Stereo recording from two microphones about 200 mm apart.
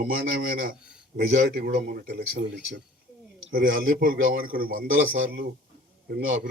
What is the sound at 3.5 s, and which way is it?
Speech, 45° right (ahead or behind).